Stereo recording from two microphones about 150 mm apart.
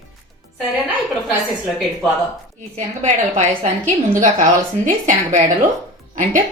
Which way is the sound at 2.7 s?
50° right (ahead or behind).